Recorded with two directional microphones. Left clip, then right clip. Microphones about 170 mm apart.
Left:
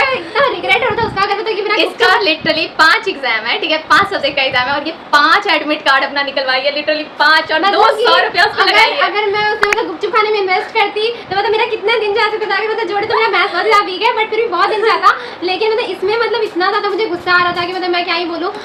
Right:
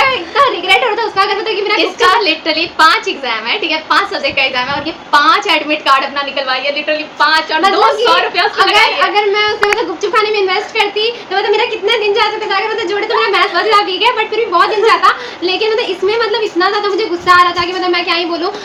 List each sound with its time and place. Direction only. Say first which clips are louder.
0.0 s a sound: right 2 dB; 5° right (ahead or behind)
1.7 s a woman's voice: right 1 dB; 20° left (ahead or behind)
8.7 s a woman's voice: right 1 dB; 5° right (ahead or behind)